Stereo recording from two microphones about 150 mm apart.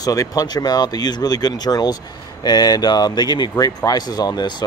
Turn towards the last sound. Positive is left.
turn(degrees=25)  # may be behind; listen again after turning